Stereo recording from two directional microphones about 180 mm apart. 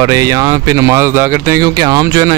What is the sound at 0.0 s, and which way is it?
Speech, 20° right (ahead or behind).